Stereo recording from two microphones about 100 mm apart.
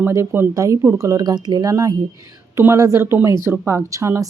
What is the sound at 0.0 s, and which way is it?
Speech, 25° right (ahead or behind).